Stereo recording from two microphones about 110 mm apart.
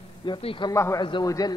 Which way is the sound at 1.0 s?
45° left (ahead or behind).